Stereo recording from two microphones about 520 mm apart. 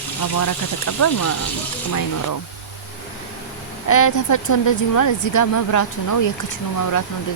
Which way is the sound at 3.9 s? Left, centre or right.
Left.